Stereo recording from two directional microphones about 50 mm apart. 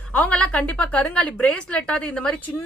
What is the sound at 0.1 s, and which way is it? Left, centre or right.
A woman's voice, left.